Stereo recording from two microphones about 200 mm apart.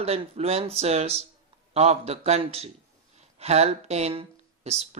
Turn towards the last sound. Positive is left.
turn(degrees=-30)  # may be behind; listen again after turning